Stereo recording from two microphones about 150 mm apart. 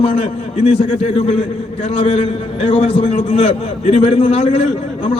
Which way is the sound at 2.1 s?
50° left (ahead or behind).